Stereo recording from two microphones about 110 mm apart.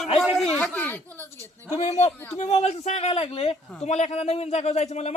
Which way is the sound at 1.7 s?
80° left.